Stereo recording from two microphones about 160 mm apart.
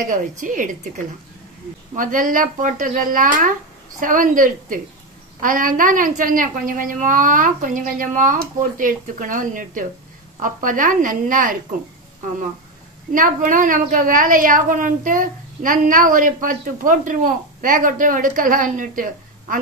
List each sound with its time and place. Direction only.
0.0 s a woman's voice: 55° right (ahead or behind)
13.1 s a woman's voice: 55° right (ahead or behind)